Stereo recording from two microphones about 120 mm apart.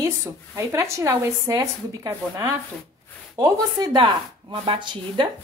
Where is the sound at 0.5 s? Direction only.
25° right (ahead or behind).